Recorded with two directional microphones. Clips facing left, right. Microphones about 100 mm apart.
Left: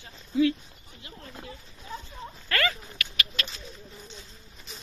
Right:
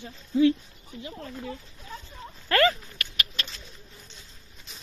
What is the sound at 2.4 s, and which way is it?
Speech, 35° right (ahead or behind).